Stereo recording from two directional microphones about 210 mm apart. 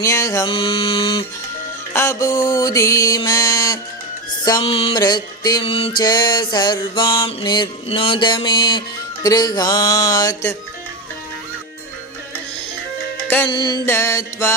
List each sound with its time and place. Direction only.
0.0 s music: 15° left (ahead or behind)
1.9 s mantra: 10° left (ahead or behind)
4.4 s music: 25° left (ahead or behind)
9.2 s mantra: 20° left (ahead or behind)
13.2 s music: 10° left (ahead or behind)
13.5 s mantra: 20° left (ahead or behind)